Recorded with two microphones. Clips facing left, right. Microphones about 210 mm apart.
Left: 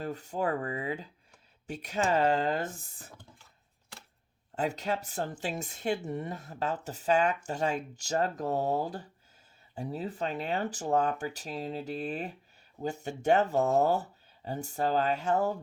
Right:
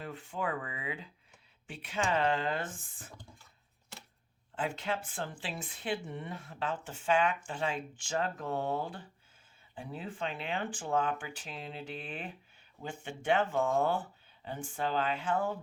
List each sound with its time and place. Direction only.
0.0 s speech: 40° left (ahead or behind)
4.5 s speech: 40° left (ahead or behind)